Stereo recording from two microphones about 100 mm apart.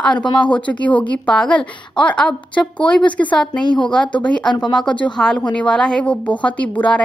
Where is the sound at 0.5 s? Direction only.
15° left (ahead or behind).